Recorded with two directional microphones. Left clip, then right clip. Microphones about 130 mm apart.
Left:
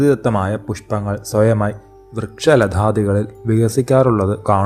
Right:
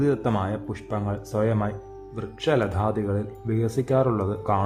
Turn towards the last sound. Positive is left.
turn(degrees=35)  # may be behind; listen again after turning